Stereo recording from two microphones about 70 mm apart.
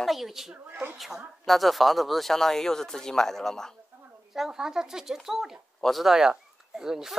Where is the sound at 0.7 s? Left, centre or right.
Right.